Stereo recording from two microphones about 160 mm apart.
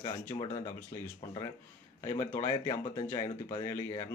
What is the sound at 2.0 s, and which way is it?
Speech, 20° left (ahead or behind).